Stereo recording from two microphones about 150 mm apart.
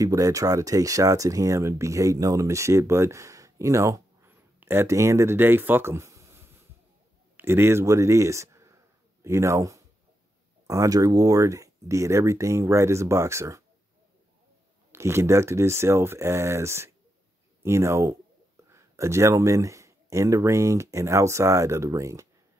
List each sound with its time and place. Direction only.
0.0 s speech: 20° right (ahead or behind)
14.9 s speech: 20° right (ahead or behind)